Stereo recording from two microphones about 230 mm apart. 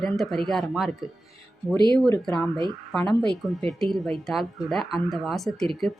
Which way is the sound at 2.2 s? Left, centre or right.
Centre.